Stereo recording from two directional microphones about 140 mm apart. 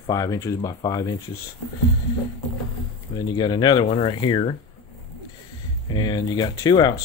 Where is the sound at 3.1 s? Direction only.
30° left (ahead or behind).